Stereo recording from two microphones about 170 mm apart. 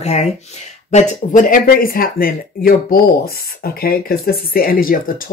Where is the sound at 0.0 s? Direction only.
40° left (ahead or behind).